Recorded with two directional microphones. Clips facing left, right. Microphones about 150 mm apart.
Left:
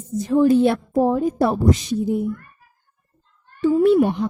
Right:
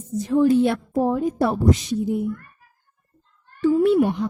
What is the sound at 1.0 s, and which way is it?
Speech, 40° left (ahead or behind).